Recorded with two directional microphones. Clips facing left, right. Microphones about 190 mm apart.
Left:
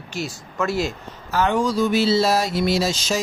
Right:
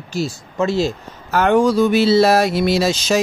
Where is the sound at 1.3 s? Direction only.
60° right (ahead or behind).